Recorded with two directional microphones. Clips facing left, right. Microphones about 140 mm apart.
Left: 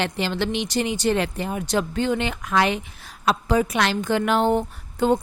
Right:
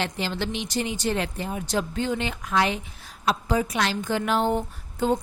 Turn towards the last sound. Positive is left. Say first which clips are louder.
# left 4 dB
turn(degrees=65)  # may be behind; listen again after turning